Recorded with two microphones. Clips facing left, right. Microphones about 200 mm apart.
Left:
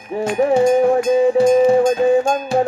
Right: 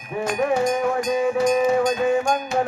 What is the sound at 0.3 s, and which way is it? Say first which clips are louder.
Music: left 8 dB; 30° left (ahead or behind).